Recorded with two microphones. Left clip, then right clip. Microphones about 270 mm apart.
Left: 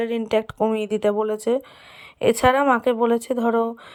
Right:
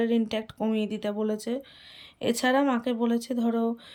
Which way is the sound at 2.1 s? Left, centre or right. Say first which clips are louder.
Left 7 dB; centre.